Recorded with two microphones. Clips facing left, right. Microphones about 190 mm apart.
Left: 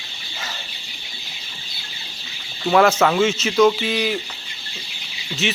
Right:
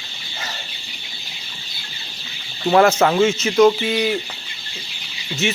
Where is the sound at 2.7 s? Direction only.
25° right (ahead or behind).